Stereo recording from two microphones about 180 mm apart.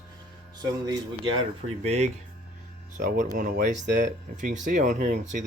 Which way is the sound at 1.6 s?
35° right (ahead or behind).